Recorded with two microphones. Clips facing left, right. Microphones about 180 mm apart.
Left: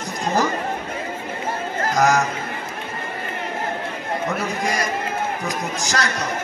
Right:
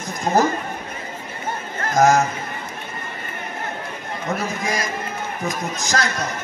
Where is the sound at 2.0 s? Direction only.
50° right (ahead or behind).